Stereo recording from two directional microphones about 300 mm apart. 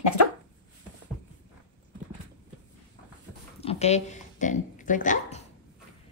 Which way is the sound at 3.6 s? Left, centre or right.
Left.